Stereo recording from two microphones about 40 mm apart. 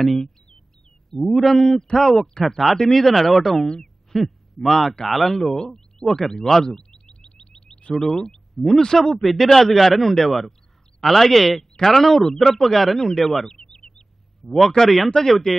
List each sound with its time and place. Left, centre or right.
1.1 s speech: centre
3.4 s a man's voice: centre
6.7 s a sound: centre
7.9 s speech: centre
8.5 s speech: centre
13.5 s a sound: centre
15.2 s speech: centre